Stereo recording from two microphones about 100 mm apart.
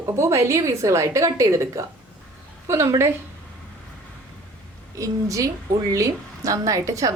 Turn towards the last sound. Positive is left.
turn(degrees=-35)  # may be behind; listen again after turning